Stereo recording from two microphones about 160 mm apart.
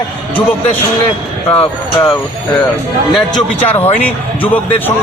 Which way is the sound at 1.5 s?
35° left (ahead or behind).